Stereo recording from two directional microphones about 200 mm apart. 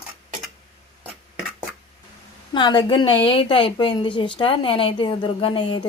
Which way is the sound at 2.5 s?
25° left (ahead or behind).